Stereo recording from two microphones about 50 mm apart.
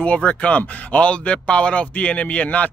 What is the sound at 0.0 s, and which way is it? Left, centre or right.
Speech, left.